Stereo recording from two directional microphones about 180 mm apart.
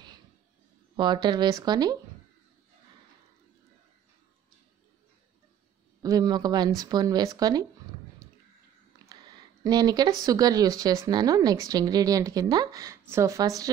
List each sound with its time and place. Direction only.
0.9 s speech: 25° right (ahead or behind)
6.0 s speech: 20° right (ahead or behind)
9.1 s speech: 20° right (ahead or behind)